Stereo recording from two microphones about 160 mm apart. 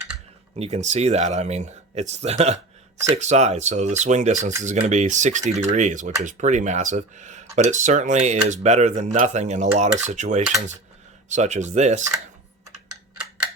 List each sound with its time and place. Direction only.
0.5 s speech: 45° right (ahead or behind)